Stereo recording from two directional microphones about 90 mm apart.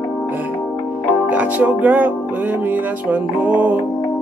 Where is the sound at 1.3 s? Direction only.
15° right (ahead or behind).